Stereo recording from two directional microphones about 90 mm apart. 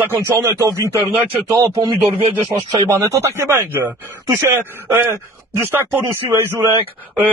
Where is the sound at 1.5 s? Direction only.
35° right (ahead or behind).